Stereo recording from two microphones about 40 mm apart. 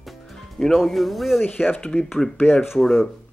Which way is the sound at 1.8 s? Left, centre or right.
Left.